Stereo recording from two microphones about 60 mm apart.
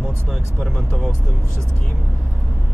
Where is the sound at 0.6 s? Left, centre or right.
Centre.